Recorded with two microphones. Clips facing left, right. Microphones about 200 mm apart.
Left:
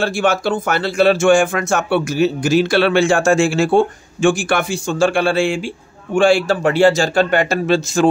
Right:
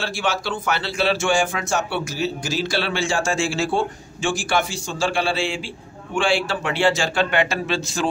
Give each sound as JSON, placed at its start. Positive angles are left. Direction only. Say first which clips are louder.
{"t": 0.0, "sound": "speech", "louder": "left 8 dB", "side_deg": 50}